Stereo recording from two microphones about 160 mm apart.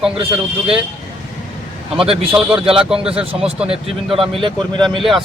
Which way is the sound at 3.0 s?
35° right (ahead or behind).